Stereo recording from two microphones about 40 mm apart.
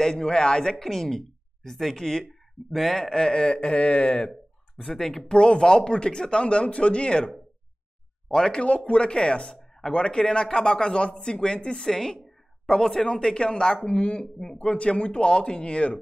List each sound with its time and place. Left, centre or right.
0.0 s a man's voice: centre
0.8 s a man's voice: centre
3.6 s speech: left
4.7 s speech: centre
5.3 s a man's voice: left